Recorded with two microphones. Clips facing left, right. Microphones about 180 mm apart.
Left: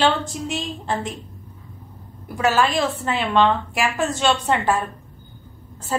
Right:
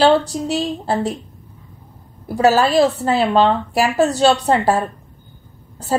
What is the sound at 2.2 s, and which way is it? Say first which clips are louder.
A woman's voice: right 5 dB; 35° right (ahead or behind).